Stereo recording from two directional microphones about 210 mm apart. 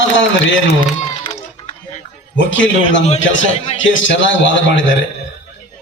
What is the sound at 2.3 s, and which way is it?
A man's voice, 60° left (ahead or behind).